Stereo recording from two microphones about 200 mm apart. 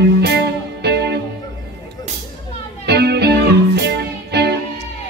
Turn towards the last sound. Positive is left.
turn(degrees=-55)  # may be behind; listen again after turning